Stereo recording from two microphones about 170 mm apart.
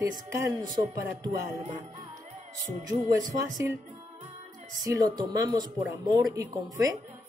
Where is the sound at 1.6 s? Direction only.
40° right (ahead or behind).